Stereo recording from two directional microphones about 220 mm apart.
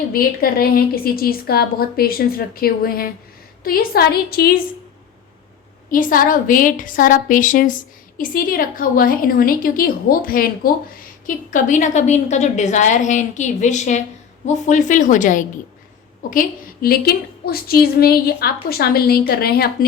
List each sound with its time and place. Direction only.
0.1 s a woman's voice: 40° left (ahead or behind)
5.9 s a woman's voice: 40° left (ahead or behind)